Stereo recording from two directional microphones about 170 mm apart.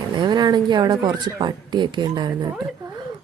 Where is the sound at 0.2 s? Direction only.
25° right (ahead or behind).